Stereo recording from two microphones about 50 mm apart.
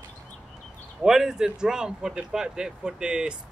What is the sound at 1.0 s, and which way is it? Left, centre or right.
Speech, centre.